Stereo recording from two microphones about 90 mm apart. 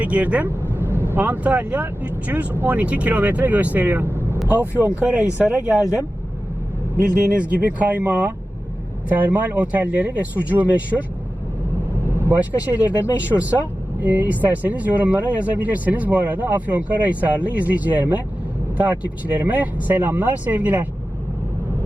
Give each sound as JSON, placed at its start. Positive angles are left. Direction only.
{"t": 0.0, "sound": "speech", "side_deg": -15}
{"t": 7.0, "sound": "speech", "side_deg": -15}
{"t": 12.7, "sound": "speech", "side_deg": -15}